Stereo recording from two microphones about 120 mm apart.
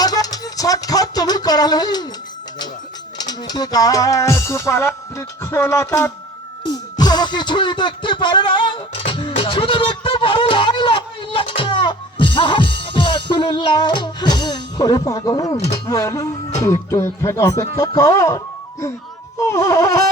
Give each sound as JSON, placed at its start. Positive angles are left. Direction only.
{"t": 0.0, "sound": "music", "side_deg": 30}
{"t": 3.2, "sound": "music", "side_deg": 35}
{"t": 6.7, "sound": "music", "side_deg": 35}
{"t": 10.5, "sound": "speech", "side_deg": 40}
{"t": 19.4, "sound": "music", "side_deg": 25}